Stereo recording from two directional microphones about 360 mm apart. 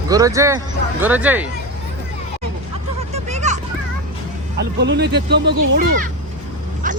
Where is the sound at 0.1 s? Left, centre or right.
Centre.